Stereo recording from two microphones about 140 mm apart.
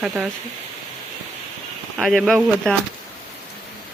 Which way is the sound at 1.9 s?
Centre (ahead or behind).